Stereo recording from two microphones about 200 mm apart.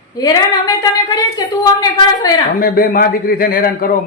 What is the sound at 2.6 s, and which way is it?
A man's voice, 45° left (ahead or behind).